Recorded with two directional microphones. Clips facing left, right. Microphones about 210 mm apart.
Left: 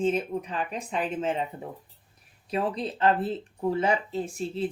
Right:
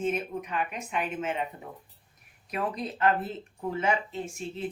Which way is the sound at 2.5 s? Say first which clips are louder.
Left 4 dB; 30° left (ahead or behind).